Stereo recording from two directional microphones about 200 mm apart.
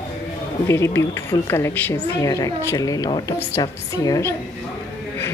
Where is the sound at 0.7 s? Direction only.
15° left (ahead or behind).